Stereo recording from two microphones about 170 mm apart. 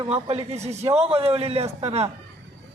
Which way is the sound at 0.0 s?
35° right (ahead or behind).